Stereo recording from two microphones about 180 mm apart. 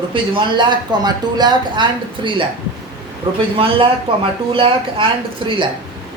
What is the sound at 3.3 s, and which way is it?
Speech, 25° right (ahead or behind).